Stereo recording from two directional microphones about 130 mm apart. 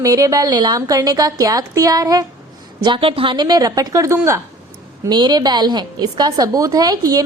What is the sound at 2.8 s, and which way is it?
A woman's voice, 40° right (ahead or behind).